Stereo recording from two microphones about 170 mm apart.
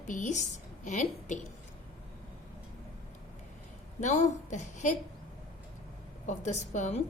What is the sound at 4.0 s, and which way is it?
Speech, 45° left (ahead or behind).